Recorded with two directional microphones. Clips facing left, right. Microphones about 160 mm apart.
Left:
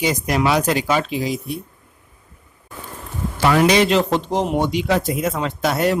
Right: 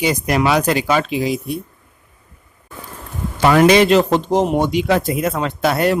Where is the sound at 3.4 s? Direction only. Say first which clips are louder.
Right 4 dB; 60° right (ahead or behind).